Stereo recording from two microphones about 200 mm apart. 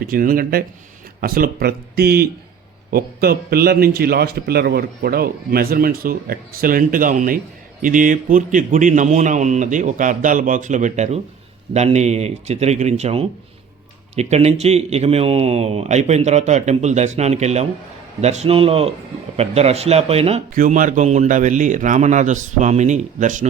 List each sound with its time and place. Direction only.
0.0 s a man's voice: 45° right (ahead or behind)
20.5 s a man's voice: 40° right (ahead or behind)